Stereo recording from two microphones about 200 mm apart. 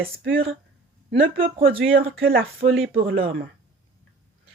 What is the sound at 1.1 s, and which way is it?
Speech, 30° right (ahead or behind).